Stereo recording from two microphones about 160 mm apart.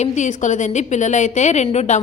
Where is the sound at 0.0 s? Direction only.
50° left (ahead or behind).